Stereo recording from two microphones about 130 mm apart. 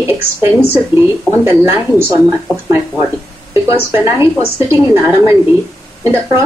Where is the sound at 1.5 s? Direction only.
15° right (ahead or behind).